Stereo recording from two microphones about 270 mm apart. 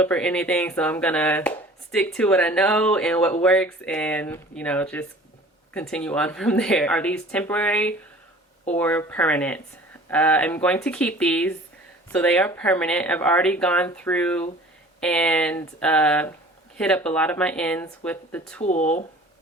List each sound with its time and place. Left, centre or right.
0.0 s speech: centre
18.6 s speech: left